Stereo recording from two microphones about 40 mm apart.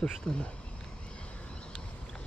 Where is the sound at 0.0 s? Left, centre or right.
Left.